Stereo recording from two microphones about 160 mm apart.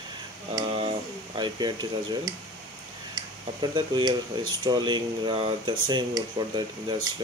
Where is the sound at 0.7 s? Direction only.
35° right (ahead or behind).